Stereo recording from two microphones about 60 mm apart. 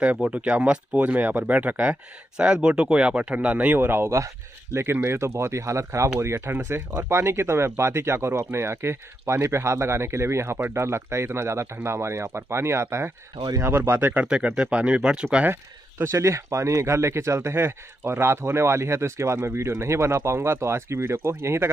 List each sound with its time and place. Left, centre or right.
0.3 s speech: right
14.2 s speech: centre
16.0 s speech: right